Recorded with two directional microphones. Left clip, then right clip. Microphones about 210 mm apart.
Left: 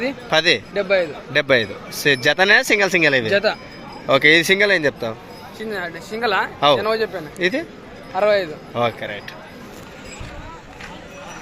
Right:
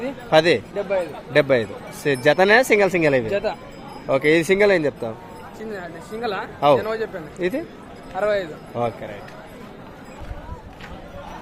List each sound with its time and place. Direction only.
0.3 s speech: centre (ahead or behind)
0.8 s a man's voice: 45° left (ahead or behind)
1.3 s speech: centre (ahead or behind)
3.2 s speech: 35° left (ahead or behind)
4.0 s speech: centre (ahead or behind)
5.5 s speech: 20° left (ahead or behind)
7.3 s speech: 5° right (ahead or behind)
8.1 s speech: 30° left (ahead or behind)
8.7 s speech: centre (ahead or behind)